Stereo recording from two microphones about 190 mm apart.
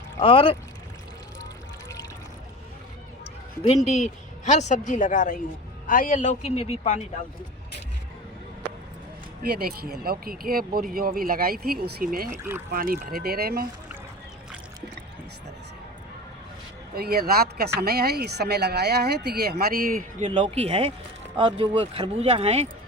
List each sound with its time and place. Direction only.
0.2 s speech: 30° left (ahead or behind)
3.8 s a woman's voice: 40° left (ahead or behind)
9.4 s speech: 55° right (ahead or behind)
12.4 s speech: 10° right (ahead or behind)
12.7 s speech: 50° right (ahead or behind)
16.9 s speech: 55° right (ahead or behind); by 22.7 s 35° right (ahead or behind)